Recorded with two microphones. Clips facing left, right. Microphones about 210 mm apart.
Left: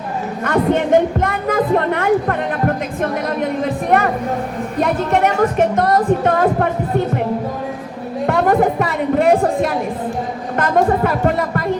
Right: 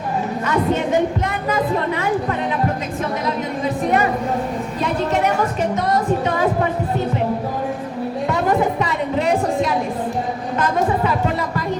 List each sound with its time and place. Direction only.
0.4 s a woman's voice: 55° left (ahead or behind)
3.0 s a sound: 55° left (ahead or behind)
4.8 s music: 55° left (ahead or behind)
8.3 s music: 55° left (ahead or behind)